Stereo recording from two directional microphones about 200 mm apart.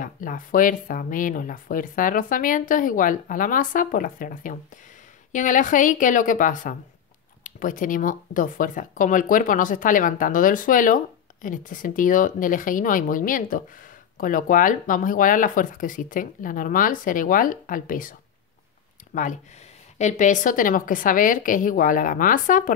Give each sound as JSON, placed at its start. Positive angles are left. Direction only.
{"t": 0.0, "sound": "speech", "side_deg": 40}
{"t": 19.1, "sound": "speech", "side_deg": 40}